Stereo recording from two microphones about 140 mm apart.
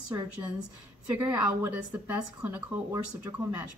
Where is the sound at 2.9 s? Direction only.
25° right (ahead or behind).